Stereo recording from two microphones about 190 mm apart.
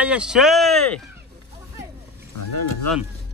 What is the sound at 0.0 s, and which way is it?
Speech, 5° right (ahead or behind).